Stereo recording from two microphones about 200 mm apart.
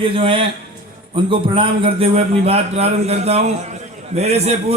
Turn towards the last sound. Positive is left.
turn(degrees=-30)  # may be behind; listen again after turning